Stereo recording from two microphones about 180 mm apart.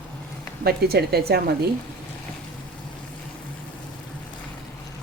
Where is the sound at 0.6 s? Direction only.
60° right (ahead or behind).